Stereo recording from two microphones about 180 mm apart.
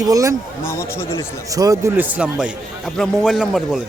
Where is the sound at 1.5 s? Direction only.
20° right (ahead or behind); by 3.8 s centre (ahead or behind).